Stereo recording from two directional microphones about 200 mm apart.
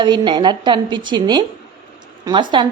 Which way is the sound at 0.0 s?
20° right (ahead or behind).